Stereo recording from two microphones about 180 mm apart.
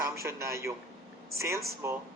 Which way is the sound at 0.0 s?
15° right (ahead or behind).